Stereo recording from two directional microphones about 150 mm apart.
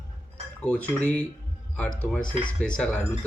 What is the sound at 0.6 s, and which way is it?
Speech, 10° left (ahead or behind).